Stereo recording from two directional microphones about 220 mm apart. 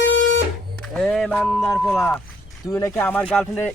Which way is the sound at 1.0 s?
5° left (ahead or behind).